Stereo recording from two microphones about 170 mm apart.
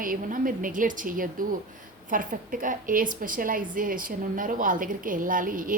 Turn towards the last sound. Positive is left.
turn(degrees=-55)  # may be behind; listen again after turning